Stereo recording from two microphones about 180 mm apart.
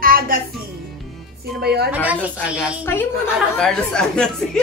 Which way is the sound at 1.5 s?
65° right (ahead or behind).